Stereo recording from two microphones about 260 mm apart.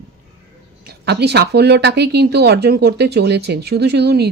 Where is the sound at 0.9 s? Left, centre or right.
Right.